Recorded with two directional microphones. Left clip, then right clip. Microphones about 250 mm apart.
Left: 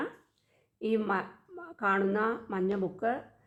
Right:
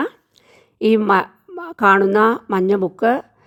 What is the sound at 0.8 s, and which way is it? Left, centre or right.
A woman's voice, right.